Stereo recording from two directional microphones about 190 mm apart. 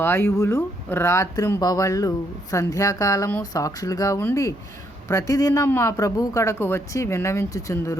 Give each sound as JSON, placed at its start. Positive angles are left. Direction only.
{"t": 0.0, "sound": "speech", "side_deg": 15}